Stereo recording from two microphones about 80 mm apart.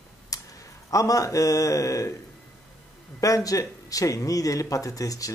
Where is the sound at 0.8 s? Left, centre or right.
Left.